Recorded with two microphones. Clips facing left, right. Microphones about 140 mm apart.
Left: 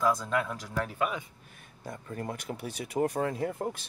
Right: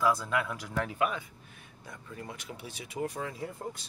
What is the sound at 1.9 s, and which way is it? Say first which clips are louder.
Speech: left 6 dB; 50° left (ahead or behind).